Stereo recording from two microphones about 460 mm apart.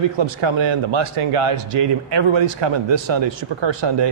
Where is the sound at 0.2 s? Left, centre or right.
Right.